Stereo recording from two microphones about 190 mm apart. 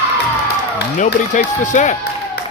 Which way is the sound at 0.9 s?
40° left (ahead or behind).